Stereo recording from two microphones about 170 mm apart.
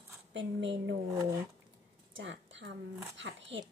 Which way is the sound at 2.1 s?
90° right.